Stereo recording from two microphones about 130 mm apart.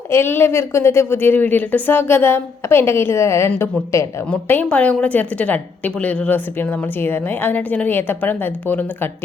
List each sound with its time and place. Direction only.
0.1 s a woman's voice: 20° left (ahead or behind)